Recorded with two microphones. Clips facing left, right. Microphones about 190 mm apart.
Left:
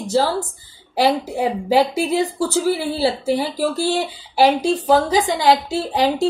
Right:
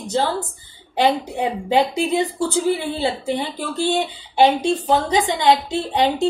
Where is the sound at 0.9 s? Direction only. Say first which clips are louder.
Left 1 dB; 20° right (ahead or behind).